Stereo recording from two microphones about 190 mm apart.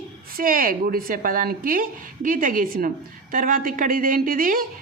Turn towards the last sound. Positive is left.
turn(degrees=-45)  # may be behind; listen again after turning